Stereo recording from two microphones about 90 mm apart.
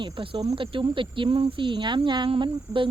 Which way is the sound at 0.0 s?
75° right (ahead or behind).